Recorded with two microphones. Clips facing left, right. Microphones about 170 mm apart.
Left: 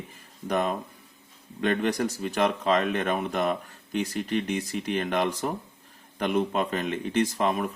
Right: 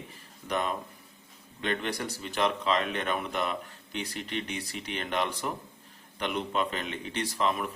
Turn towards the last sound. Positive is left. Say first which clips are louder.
# left 5 dB
turn(degrees=45)  # may be behind; listen again after turning